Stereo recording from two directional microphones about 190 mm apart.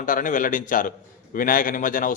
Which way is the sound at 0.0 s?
45° left (ahead or behind).